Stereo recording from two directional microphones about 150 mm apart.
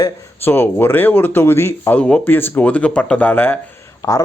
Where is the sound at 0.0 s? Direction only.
15° left (ahead or behind).